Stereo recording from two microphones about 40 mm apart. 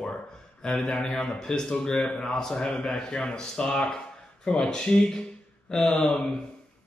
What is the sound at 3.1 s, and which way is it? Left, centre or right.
Speech, left.